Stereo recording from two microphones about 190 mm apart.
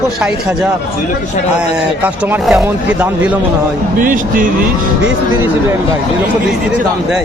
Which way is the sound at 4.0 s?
45° right (ahead or behind).